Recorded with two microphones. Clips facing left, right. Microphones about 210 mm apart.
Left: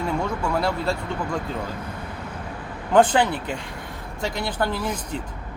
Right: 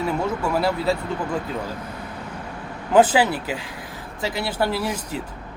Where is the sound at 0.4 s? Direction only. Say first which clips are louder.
Right 3 dB; 5° right (ahead or behind).